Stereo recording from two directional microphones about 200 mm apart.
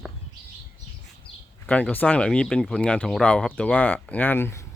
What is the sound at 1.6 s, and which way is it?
Speech, 5° left (ahead or behind).